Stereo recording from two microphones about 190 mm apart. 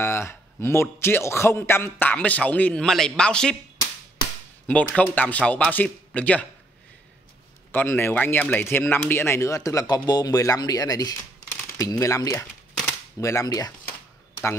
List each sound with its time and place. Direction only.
0.0 s a man's voice: 15° left (ahead or behind)
4.6 s a man's voice: 5° left (ahead or behind)
7.7 s a man's voice: 10° left (ahead or behind)